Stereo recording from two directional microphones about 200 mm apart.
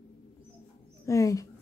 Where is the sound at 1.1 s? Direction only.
15° left (ahead or behind).